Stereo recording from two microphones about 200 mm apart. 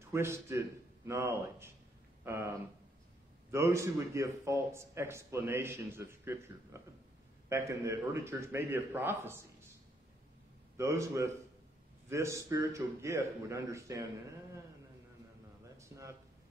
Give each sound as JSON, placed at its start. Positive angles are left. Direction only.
{"t": 0.1, "sound": "a man's voice", "side_deg": -15}
{"t": 3.5, "sound": "a man's voice", "side_deg": -15}
{"t": 10.8, "sound": "a man's voice", "side_deg": -15}
{"t": 15.8, "sound": "a sound", "side_deg": -15}